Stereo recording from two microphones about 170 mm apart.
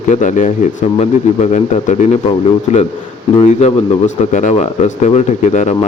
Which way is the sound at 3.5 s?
40° left (ahead or behind).